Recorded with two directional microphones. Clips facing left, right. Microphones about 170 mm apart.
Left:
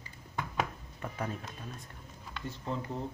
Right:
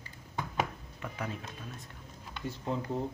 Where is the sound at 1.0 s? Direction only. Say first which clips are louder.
Left 1 dB; 40° left (ahead or behind).